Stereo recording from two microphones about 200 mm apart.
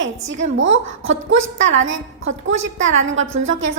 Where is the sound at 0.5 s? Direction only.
70° right (ahead or behind).